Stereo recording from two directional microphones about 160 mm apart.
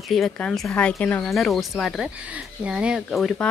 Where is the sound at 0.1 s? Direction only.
Centre (ahead or behind).